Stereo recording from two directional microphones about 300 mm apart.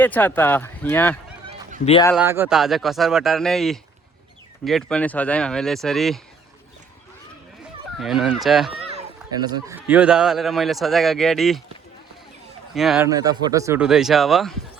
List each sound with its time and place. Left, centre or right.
0.0 s speech: centre
1.8 s speech: centre
2.1 s a man's voice: centre
7.9 s a man's voice: centre
8.9 s a man's voice: centre
12.7 s a man's voice: centre
13.1 s a man's voice: centre